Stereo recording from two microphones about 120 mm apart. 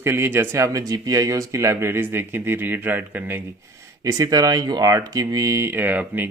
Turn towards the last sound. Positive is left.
turn(degrees=-15)  # may be behind; listen again after turning